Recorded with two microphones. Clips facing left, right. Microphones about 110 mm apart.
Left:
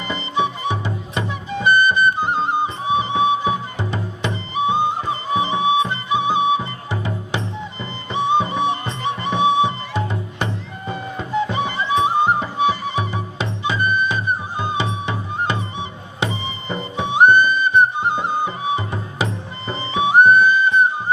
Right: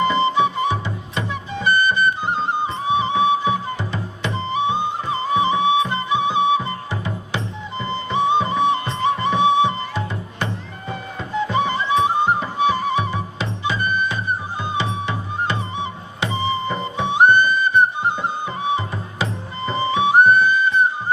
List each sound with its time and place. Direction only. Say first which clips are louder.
0.3 s music: right 2 dB; 20° left (ahead or behind)
5.3 s flute: right 1 dB; 20° left (ahead or behind)
8.1 s music: even; 20° left (ahead or behind)
11.3 s music: right 1 dB; 20° left (ahead or behind)